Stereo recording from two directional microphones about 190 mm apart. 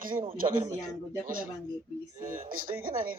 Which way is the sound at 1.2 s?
45° right (ahead or behind).